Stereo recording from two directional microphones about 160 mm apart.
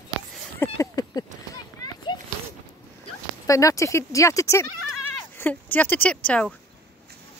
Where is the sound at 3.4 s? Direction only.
20° left (ahead or behind).